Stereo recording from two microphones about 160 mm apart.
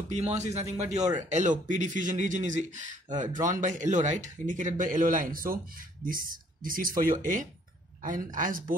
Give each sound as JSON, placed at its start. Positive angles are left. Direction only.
{"t": 0.3, "sound": "a man's voice", "side_deg": -45}